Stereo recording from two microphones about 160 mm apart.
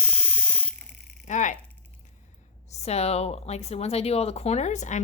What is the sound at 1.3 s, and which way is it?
Speech, 50° left (ahead or behind).